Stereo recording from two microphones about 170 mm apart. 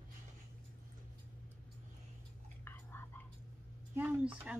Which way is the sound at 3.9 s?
10° right (ahead or behind).